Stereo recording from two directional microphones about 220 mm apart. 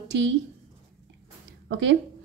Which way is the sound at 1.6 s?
55° right (ahead or behind).